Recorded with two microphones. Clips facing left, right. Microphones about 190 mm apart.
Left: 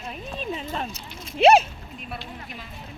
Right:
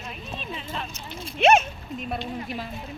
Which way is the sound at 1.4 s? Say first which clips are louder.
Left 3 dB; 35° left (ahead or behind).